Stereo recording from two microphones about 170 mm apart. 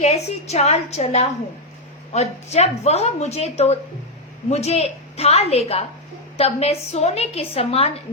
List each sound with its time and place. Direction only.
0.0 s a woman's voice: 40° left (ahead or behind)